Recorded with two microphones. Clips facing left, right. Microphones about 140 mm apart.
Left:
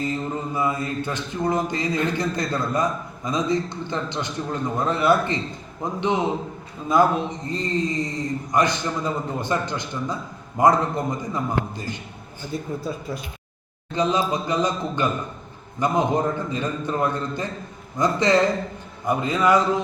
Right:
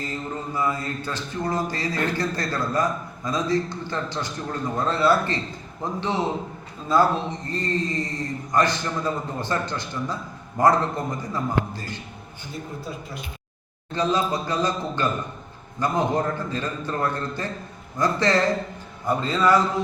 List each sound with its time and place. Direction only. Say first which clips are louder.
0.5 s speech: left 1 dB; 20° left (ahead or behind)
13.9 s speech: left 1 dB; 20° left (ahead or behind)